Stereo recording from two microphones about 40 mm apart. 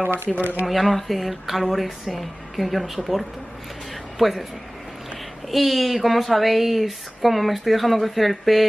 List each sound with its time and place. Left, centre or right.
0.0 s speech: right
0.7 s speech: centre
5.5 s speech: centre